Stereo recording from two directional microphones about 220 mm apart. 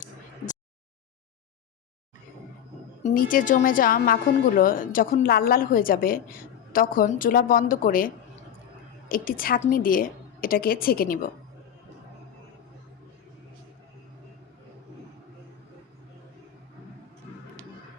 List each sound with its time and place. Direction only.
3.0 s a woman's voice: 40° left (ahead or behind)